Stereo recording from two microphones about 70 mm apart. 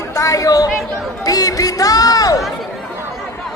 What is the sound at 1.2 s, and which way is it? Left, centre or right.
Music, left.